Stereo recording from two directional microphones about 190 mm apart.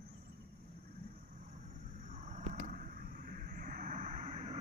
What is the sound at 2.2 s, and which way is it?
Vehicle, 40° right (ahead or behind).